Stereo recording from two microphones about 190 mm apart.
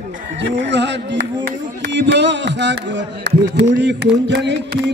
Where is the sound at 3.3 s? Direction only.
65° right (ahead or behind).